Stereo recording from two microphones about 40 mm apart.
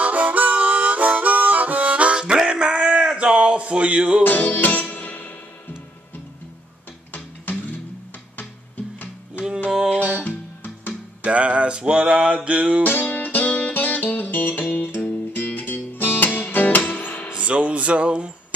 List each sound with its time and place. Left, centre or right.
0.0 s harmonica: right
1.9 s music: right
3.2 s a sound: right
4.2 s music: left
4.9 s music: left
7.5 s music: left
9.7 s music: centre
10.2 s music: left
11.2 s a sound: right
12.4 s music: right
12.8 s music: left
15.0 s music: left
17.4 s music: right